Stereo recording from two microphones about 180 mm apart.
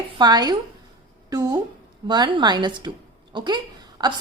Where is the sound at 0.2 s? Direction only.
25° right (ahead or behind).